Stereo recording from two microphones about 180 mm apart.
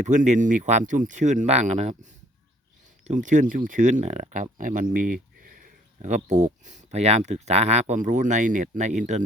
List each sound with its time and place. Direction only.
0.0 s speech: 40° right (ahead or behind)
3.1 s speech: 45° right (ahead or behind)